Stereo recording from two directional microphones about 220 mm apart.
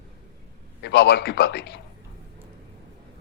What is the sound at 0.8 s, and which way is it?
Speech, 50° left (ahead or behind).